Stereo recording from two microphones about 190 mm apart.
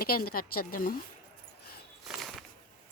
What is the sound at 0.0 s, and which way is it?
Speech, 50° left (ahead or behind).